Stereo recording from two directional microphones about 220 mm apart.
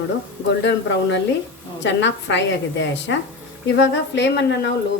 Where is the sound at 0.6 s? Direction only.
55° left (ahead or behind).